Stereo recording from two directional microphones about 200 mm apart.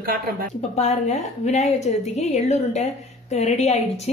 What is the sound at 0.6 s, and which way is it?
A woman's voice, 35° left (ahead or behind).